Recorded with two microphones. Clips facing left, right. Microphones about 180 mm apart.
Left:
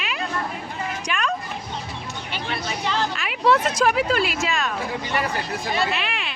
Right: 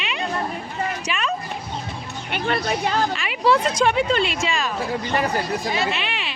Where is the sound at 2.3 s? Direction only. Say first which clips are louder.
Right 7 dB; 55° right (ahead or behind).